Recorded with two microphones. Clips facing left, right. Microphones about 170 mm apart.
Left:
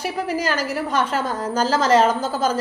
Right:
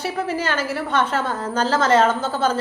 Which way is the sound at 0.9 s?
10° left (ahead or behind).